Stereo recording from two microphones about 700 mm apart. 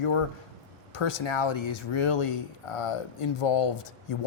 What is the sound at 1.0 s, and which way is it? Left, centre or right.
Speech, left.